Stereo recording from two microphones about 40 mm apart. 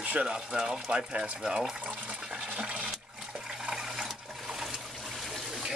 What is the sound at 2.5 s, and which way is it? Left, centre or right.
Toilet flush, right.